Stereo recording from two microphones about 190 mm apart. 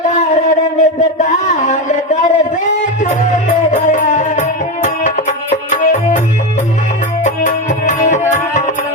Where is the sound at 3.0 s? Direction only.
40° left (ahead or behind).